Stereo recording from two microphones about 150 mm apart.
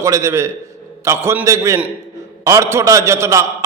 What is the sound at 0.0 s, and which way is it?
A man's voice, 20° right (ahead or behind).